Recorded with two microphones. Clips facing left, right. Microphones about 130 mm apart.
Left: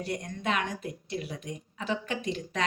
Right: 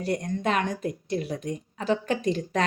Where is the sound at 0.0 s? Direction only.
40° right (ahead or behind).